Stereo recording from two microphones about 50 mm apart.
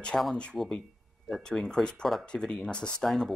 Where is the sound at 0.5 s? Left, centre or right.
Centre.